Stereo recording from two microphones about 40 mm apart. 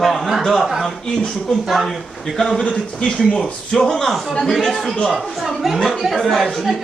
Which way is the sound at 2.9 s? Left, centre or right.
Left.